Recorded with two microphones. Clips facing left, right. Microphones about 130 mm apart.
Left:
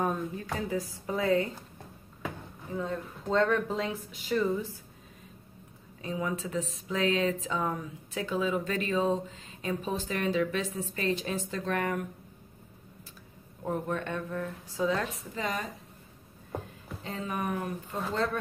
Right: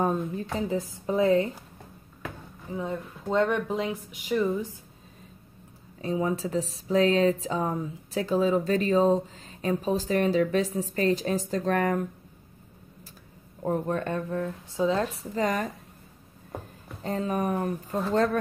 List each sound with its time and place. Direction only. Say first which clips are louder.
0.0 s a woman's voice: right 4 dB; 30° right (ahead or behind)
2.7 s speech: right 2 dB; 15° right (ahead or behind)
5.9 s speech: right 6 dB; 35° right (ahead or behind)
13.6 s speech: right 5 dB; 35° right (ahead or behind)
14.8 s a woman's voice: right 4 dB; 25° right (ahead or behind)
15.3 s a woman's voice: right 7 dB; 45° right (ahead or behind)
17.0 s a woman's voice: right 6 dB; 40° right (ahead or behind)